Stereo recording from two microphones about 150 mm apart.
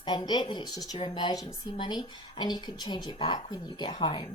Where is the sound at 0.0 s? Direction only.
30° left (ahead or behind).